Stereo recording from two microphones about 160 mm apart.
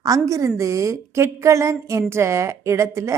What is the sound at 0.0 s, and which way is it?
A woman's voice, 20° right (ahead or behind).